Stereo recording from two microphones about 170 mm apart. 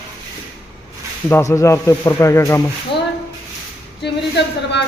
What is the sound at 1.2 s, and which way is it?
Speech, 15° left (ahead or behind).